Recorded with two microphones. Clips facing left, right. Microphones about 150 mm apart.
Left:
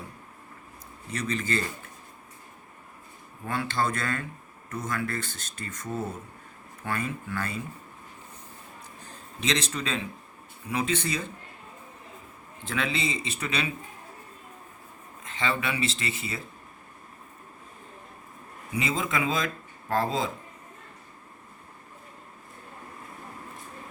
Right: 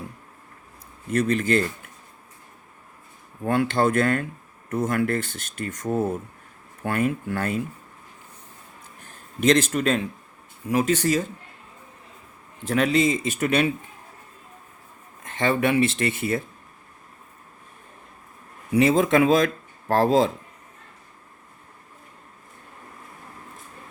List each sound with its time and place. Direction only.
1.1 s speech: 55° right (ahead or behind)
3.4 s speech: 55° right (ahead or behind)
9.4 s speech: 50° right (ahead or behind)
12.6 s speech: 45° right (ahead or behind)
15.4 s speech: 55° right (ahead or behind)
18.8 s speech: 70° right (ahead or behind)